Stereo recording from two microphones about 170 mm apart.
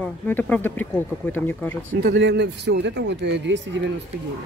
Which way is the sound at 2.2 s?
85° right.